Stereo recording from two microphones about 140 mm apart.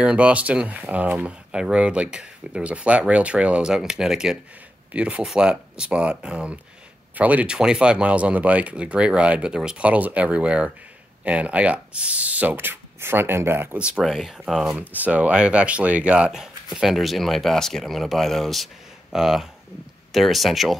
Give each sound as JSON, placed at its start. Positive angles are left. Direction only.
{"t": 0.0, "sound": "speech", "side_deg": -10}